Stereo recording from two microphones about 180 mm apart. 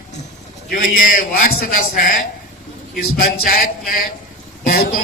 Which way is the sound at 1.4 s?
45° left (ahead or behind).